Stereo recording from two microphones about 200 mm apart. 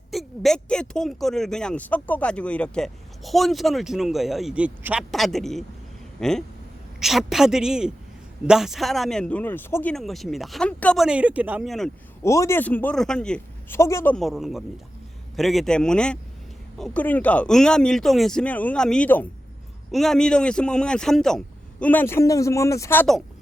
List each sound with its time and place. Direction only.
0.1 s speech: centre (ahead or behind)
12.2 s a man's voice: 15° left (ahead or behind)